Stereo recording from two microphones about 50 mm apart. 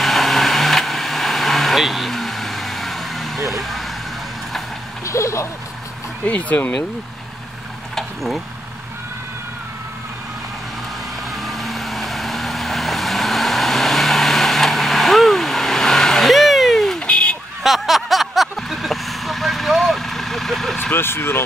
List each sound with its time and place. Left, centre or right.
0.0 s vehicle: centre
5.0 s speech: left
6.2 s speech: left
7.9 s a sound: centre
11.4 s vehicle: centre
17.0 s car alarm: left
17.6 s vehicle: centre
20.9 s speech: left